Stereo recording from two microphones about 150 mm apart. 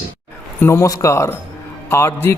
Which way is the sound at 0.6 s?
20° left (ahead or behind).